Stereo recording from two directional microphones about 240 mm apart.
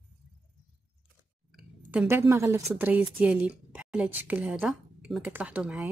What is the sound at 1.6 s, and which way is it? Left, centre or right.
A woman's voice, centre.